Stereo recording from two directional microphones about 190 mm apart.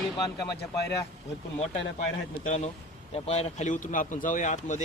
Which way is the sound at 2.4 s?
40° left (ahead or behind).